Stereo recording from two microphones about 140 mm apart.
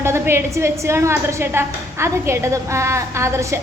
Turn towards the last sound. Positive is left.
turn(degrees=-20)  # may be behind; listen again after turning